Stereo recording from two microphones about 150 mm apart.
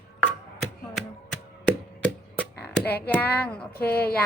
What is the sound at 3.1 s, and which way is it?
Speech, 10° left (ahead or behind).